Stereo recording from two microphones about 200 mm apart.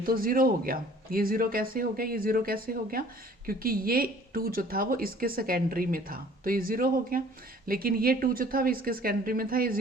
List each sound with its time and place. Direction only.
0.0 s speech: 45° right (ahead or behind)